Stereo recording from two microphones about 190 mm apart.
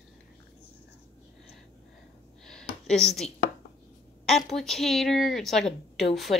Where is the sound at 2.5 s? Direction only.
5° left (ahead or behind).